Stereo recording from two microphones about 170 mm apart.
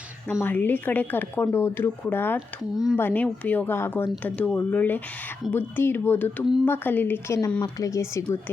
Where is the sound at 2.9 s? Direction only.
10° left (ahead or behind).